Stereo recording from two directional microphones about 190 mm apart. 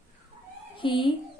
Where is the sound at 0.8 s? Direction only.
25° left (ahead or behind).